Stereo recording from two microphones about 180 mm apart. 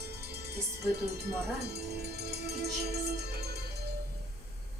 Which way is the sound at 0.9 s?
15° right (ahead or behind).